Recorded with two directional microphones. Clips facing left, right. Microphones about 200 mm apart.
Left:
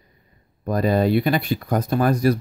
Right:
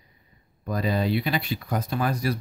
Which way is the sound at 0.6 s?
50° left (ahead or behind).